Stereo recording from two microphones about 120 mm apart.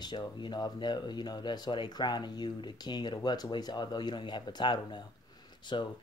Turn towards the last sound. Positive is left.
turn(degrees=40)  # may be behind; listen again after turning